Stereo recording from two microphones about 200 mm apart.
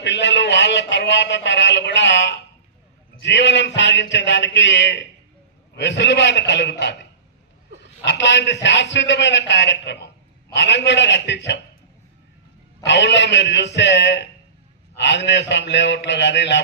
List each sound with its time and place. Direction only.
0.0 s a man's voice: 60° left (ahead or behind)
7.8 s a sound: 60° left (ahead or behind)
8.6 s a man's voice: 60° left (ahead or behind)
12.8 s a man's voice: 60° left (ahead or behind)